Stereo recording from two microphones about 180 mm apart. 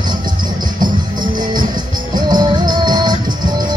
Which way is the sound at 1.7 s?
25° right (ahead or behind).